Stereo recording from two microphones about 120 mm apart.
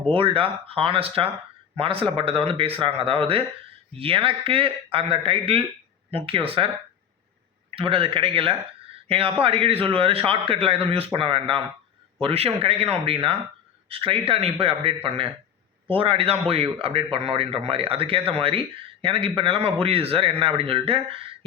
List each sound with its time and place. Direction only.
0.1 s a man's voice: 50° right (ahead or behind)
7.8 s a man's voice: 50° right (ahead or behind)